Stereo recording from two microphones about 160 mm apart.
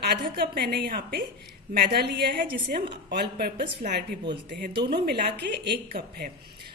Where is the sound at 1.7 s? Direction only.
90° right.